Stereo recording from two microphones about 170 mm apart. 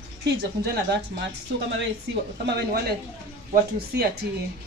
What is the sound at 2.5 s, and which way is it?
Speech, 70° right (ahead or behind).